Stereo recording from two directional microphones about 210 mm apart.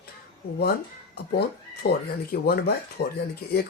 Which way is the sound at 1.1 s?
50° left (ahead or behind).